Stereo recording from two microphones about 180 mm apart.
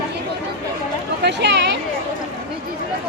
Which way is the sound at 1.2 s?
70° right (ahead or behind).